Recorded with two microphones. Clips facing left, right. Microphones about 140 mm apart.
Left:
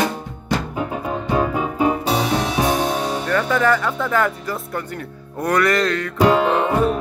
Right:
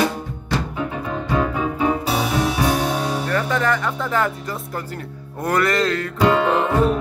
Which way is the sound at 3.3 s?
30° right (ahead or behind).